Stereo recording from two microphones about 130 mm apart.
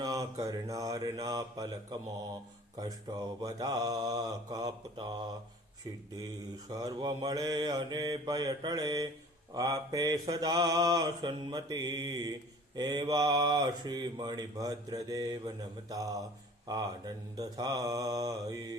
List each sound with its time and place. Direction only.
0.0 s mantra: 30° right (ahead or behind)
6.7 s mantra: 30° right (ahead or behind)